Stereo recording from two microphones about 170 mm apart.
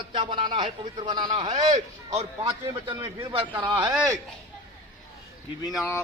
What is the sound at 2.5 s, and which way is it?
A man's voice, 25° right (ahead or behind).